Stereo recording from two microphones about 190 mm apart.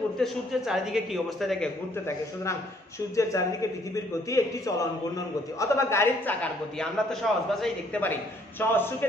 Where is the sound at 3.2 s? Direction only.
15° left (ahead or behind).